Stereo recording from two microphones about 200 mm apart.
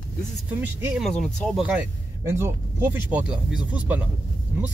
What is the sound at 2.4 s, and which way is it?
Speech, 10° right (ahead or behind).